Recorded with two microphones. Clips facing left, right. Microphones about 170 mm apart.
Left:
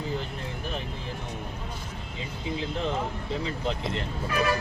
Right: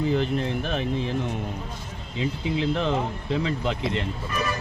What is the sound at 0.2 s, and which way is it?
Speech, 90° right.